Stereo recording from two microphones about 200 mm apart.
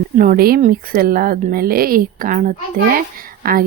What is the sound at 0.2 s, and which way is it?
Speech, 45° right (ahead or behind).